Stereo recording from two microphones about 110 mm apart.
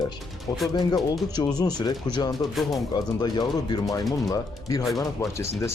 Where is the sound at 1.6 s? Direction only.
40° left (ahead or behind).